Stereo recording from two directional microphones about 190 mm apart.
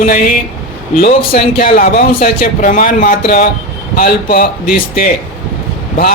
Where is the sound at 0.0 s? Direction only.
45° left (ahead or behind).